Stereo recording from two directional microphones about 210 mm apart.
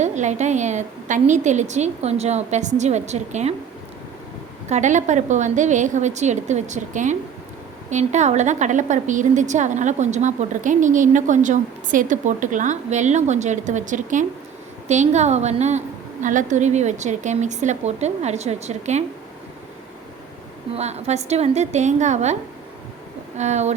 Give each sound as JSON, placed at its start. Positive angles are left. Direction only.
{"t": 0.0, "sound": "a woman's voice", "side_deg": -35}
{"t": 4.7, "sound": "a woman's voice", "side_deg": -35}
{"t": 20.7, "sound": "a woman's voice", "side_deg": -30}
{"t": 23.4, "sound": "a woman's voice", "side_deg": -35}